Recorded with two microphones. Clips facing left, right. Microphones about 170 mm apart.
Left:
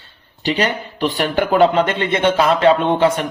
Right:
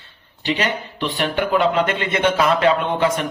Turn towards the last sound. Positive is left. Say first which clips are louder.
# left 4 dB
turn(degrees=30)  # may be behind; listen again after turning